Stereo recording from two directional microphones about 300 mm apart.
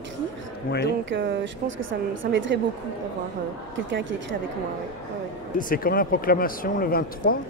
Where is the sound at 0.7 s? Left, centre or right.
Left.